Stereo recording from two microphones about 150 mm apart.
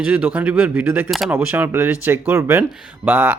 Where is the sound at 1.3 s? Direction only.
15° right (ahead or behind).